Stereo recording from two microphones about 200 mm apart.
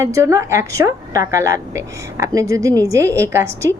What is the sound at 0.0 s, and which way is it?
A woman's voice, 15° right (ahead or behind).